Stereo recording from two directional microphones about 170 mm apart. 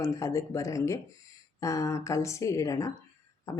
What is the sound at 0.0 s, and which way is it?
Speech, 20° left (ahead or behind).